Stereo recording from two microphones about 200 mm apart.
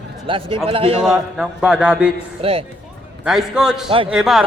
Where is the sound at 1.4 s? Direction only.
5° right (ahead or behind).